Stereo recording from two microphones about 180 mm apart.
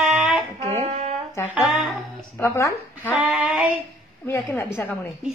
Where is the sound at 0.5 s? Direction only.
35° right (ahead or behind).